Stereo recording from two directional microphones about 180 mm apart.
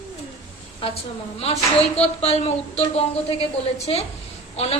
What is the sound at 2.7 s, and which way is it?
A woman's voice, 35° left (ahead or behind).